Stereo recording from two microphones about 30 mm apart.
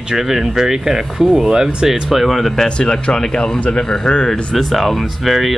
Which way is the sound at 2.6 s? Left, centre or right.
Left.